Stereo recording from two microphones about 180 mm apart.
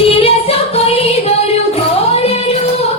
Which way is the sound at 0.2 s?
35° left (ahead or behind).